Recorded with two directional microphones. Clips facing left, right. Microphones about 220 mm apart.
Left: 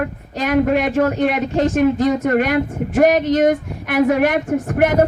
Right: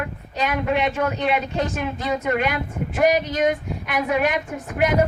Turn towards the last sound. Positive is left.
turn(degrees=50)  # may be behind; listen again after turning